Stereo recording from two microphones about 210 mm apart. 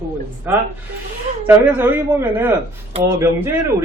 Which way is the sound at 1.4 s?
10° right (ahead or behind).